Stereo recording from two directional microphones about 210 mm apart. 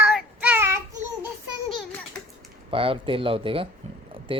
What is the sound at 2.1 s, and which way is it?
Typewriter, 5° left (ahead or behind).